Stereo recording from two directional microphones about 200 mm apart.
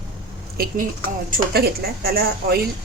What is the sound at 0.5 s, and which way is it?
A woman's voice, 50° right (ahead or behind).